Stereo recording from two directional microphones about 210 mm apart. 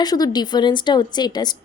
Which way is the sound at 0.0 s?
20° left (ahead or behind).